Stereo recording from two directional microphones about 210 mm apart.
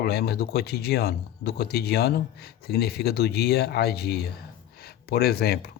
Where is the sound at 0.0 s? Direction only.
50° left (ahead or behind).